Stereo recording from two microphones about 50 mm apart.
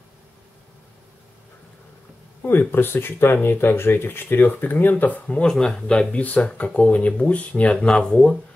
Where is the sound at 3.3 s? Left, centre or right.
Left.